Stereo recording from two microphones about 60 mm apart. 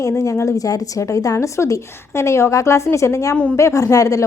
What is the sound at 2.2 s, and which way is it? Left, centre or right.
A woman's voice, left.